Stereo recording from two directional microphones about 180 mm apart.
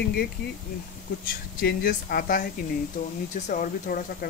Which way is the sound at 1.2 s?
55° left (ahead or behind).